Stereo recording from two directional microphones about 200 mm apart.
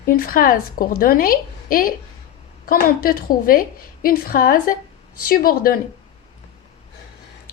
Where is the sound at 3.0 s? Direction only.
45° left (ahead or behind).